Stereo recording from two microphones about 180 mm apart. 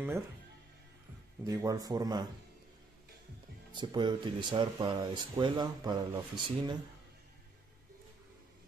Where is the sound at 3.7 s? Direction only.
25° right (ahead or behind).